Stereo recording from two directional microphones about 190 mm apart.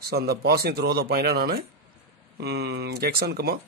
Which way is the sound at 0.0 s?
55° right (ahead or behind).